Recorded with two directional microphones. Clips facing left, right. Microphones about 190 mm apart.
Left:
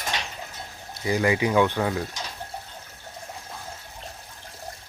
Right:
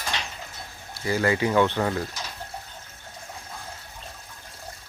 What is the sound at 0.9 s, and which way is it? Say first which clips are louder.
Speech: left 1 dB; 15° left (ahead or behind).